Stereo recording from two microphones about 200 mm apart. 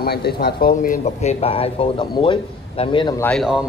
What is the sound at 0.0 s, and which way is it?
Speech, 50° left (ahead or behind).